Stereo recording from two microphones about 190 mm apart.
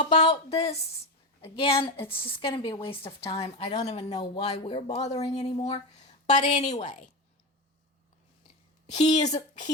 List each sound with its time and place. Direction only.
0.0 s a woman's voice: 35° left (ahead or behind)
8.9 s speech: 35° left (ahead or behind)